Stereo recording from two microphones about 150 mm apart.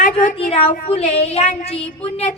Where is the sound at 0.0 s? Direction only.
65° left (ahead or behind).